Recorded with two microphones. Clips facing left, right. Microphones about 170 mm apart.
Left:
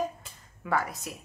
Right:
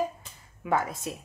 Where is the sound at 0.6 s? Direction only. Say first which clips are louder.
Right 2 dB; 20° right (ahead or behind).